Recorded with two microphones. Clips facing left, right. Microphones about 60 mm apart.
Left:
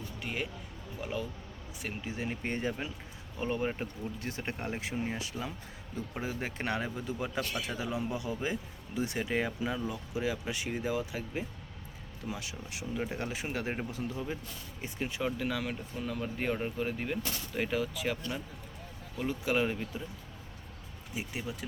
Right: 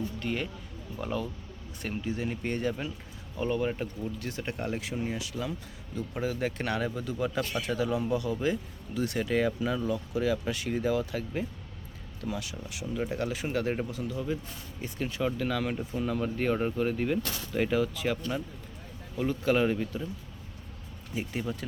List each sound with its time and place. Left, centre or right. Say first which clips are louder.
0.2 s speech: right 4 dB; centre
2.0 s speech: right 3 dB; left
14.8 s speech: right 3 dB; centre
21.2 s speech: right 5 dB; centre